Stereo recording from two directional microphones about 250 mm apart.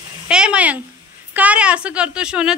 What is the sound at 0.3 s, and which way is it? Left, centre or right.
A woman's voice, centre.